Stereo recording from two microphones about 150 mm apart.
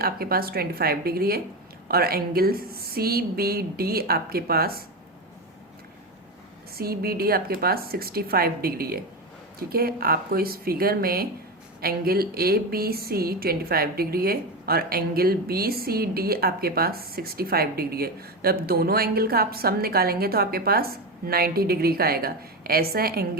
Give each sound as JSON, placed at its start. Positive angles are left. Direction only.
{"t": 0.0, "sound": "a woman's voice", "side_deg": -85}
{"t": 6.7, "sound": "a woman's voice", "side_deg": -90}